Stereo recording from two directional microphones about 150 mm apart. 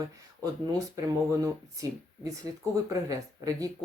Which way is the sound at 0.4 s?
20° right (ahead or behind).